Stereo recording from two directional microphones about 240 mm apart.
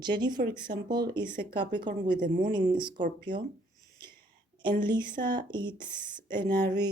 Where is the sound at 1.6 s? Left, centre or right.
Right.